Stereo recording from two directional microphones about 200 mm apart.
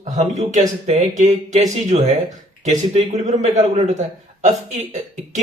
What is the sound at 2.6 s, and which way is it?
A man's voice, 35° right (ahead or behind).